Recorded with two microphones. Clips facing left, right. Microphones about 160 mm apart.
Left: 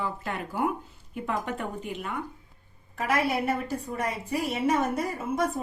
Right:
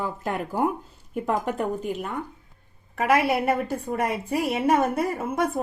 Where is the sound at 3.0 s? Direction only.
65° right (ahead or behind).